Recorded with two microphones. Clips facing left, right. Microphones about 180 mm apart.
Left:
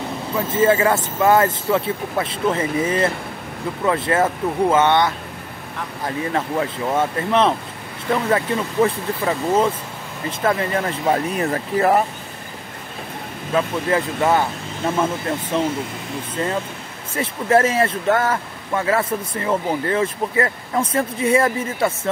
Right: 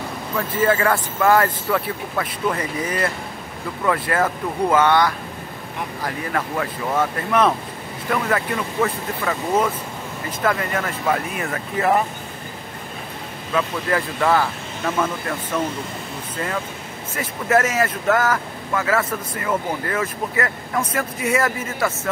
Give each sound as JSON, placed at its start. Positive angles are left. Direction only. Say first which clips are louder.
{"t": 0.4, "sound": "speech", "louder": "left 3 dB", "side_deg": 25}
{"t": 13.5, "sound": "speech", "louder": "left 2 dB", "side_deg": 25}
{"t": 17.1, "sound": "speech", "louder": "left 2 dB", "side_deg": 30}